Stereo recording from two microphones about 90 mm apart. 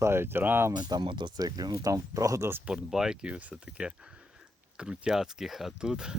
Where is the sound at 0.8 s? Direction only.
50° right (ahead or behind); by 2.5 s 35° right (ahead or behind).